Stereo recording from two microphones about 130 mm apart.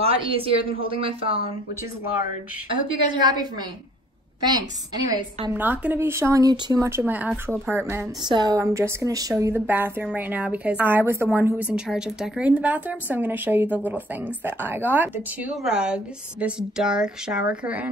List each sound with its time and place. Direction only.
0.0 s a woman's voice: 45° right (ahead or behind)
2.7 s a woman's voice: 35° right (ahead or behind)
5.5 s a woman's voice: 15° right (ahead or behind)
8.3 s a woman's voice: 30° right (ahead or behind); by 17.8 s 10° right (ahead or behind)